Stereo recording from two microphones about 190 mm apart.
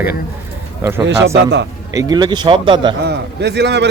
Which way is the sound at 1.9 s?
20° right (ahead or behind).